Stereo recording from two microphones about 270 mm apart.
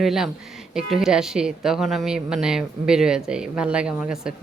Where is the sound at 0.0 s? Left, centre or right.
Centre.